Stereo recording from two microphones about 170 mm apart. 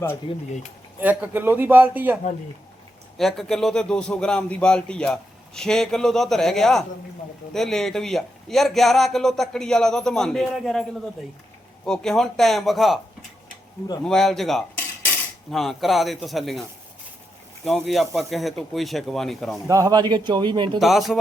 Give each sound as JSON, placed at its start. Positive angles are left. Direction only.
{"t": 0.9, "sound": "a man's voice", "side_deg": -10}
{"t": 3.2, "sound": "speech", "side_deg": 0}
{"t": 11.9, "sound": "speech", "side_deg": 5}
{"t": 14.0, "sound": "speech", "side_deg": 5}
{"t": 17.7, "sound": "speech", "side_deg": 0}
{"t": 19.6, "sound": "a man's voice", "side_deg": -20}
{"t": 20.7, "sound": "speech", "side_deg": 0}